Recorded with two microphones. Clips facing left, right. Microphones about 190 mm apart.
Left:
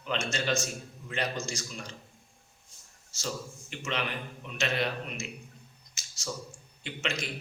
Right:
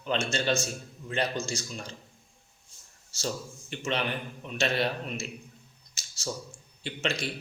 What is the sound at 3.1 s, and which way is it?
A man's voice, 30° right (ahead or behind).